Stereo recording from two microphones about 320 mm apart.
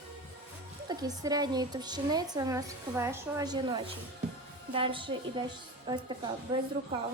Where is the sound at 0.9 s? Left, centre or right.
Centre.